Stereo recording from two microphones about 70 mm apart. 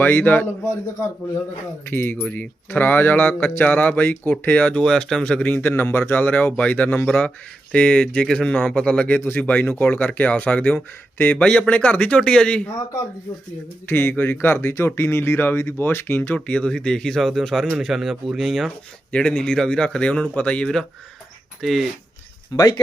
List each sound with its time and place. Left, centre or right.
0.0 s speech: left
1.9 s speech: left
6.1 s speech: left
13.8 s speech: left
16.5 s a man's voice: centre
19.1 s a man's voice: centre
22.5 s speech: left